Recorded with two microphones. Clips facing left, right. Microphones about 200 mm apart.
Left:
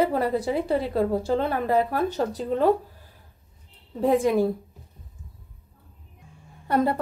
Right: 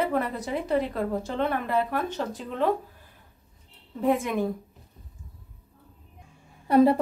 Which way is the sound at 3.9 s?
35° left (ahead or behind).